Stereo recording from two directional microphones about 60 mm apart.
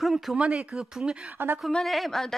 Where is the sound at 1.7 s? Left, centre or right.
Centre.